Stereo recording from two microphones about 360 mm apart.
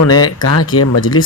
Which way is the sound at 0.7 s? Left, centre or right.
Left.